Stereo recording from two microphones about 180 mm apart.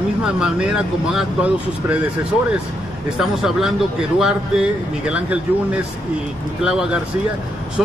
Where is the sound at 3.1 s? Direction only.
Centre (ahead or behind).